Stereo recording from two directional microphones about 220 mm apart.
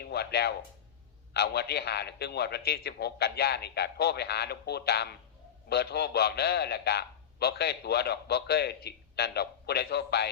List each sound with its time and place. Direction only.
0.0 s a man's voice: 45° left (ahead or behind)